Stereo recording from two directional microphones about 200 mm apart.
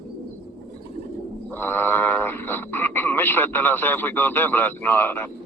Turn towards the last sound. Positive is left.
turn(degrees=10)  # may be behind; listen again after turning